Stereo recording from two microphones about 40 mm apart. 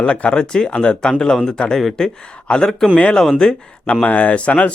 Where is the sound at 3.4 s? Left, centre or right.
Left.